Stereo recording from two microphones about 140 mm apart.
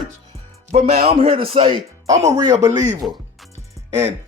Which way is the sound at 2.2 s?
25° right (ahead or behind).